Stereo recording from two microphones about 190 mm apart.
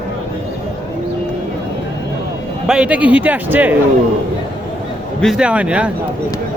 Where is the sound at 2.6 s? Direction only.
5° right (ahead or behind).